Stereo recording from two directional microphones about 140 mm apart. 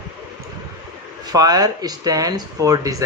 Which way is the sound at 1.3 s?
25° right (ahead or behind).